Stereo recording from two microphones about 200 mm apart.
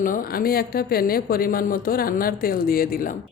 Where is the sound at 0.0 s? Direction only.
45° left (ahead or behind).